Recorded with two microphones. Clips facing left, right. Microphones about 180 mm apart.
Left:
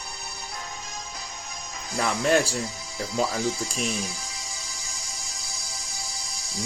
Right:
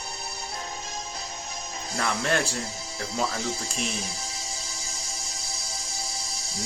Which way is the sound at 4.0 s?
30° right (ahead or behind).